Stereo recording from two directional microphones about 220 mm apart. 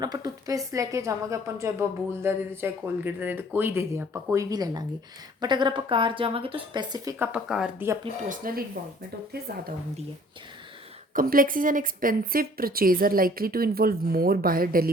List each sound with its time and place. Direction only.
0.0 s a woman's voice: 15° right (ahead or behind)
7.3 s speech: 5° right (ahead or behind)
8.3 s a woman's voice: 40° right (ahead or behind)
11.1 s a woman's voice: 40° right (ahead or behind)